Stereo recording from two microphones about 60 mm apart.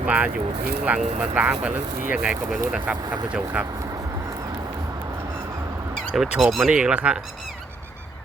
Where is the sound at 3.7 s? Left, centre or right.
Right.